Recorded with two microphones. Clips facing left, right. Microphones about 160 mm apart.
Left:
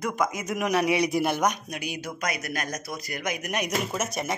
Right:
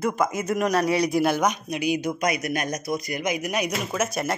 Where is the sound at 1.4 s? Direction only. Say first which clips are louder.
Right 3 dB; 10° right (ahead or behind).